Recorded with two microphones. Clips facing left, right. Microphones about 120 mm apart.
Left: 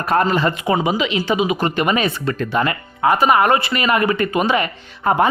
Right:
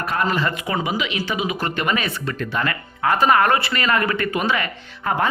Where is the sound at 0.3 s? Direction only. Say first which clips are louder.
Left 5 dB; 25° left (ahead or behind).